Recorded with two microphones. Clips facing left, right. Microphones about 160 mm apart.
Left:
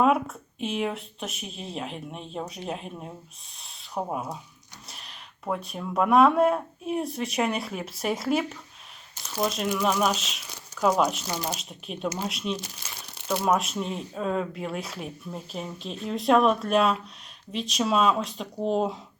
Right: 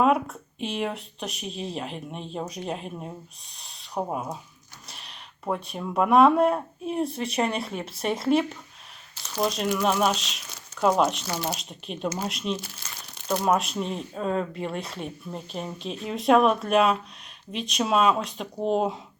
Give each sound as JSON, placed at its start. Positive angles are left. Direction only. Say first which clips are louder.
{"t": 0.0, "sound": "speech", "louder": "even", "side_deg": 0}